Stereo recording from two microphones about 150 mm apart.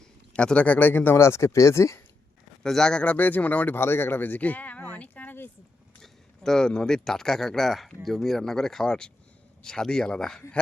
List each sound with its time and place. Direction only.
0.3 s speech: 5° left (ahead or behind)
2.6 s speech: 5° left (ahead or behind)